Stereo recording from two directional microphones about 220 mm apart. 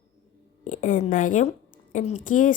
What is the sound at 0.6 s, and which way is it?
A woman's voice, 35° left (ahead or behind).